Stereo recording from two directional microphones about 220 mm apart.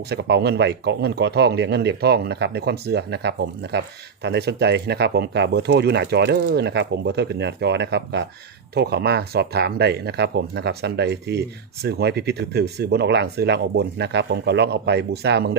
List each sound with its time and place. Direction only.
0.1 s speech: 50° right (ahead or behind)